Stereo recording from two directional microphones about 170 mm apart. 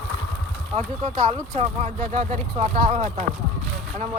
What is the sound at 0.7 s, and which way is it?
Speech, 40° right (ahead or behind).